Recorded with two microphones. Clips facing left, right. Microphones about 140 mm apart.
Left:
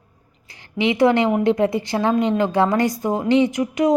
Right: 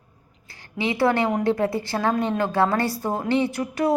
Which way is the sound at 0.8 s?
20° left (ahead or behind).